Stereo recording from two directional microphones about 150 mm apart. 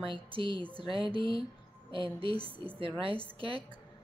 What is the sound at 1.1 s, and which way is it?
Speech, 35° right (ahead or behind).